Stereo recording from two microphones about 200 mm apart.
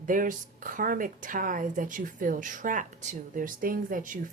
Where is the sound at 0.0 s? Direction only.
40° right (ahead or behind).